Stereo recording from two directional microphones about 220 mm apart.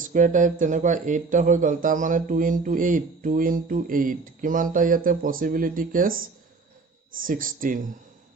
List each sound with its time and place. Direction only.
0.0 s speech: 35° right (ahead or behind)